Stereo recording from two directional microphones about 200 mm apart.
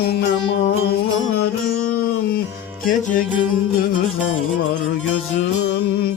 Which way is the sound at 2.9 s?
40° left (ahead or behind).